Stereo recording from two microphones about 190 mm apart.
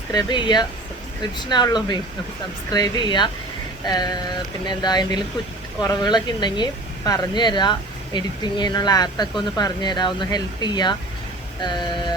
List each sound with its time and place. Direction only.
0.1 s speech: 20° left (ahead or behind)